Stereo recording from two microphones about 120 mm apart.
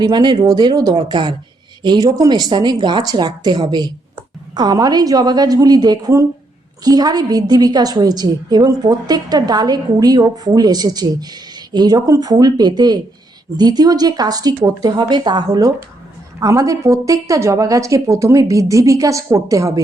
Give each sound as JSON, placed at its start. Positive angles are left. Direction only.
{"t": 0.0, "sound": "a woman's voice", "side_deg": -40}